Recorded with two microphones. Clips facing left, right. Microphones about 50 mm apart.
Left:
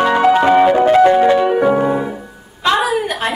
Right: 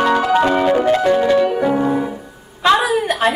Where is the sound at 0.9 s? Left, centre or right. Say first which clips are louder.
Left 4 dB; left.